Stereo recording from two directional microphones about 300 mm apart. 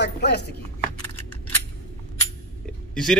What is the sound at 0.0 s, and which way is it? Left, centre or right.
Speech, left.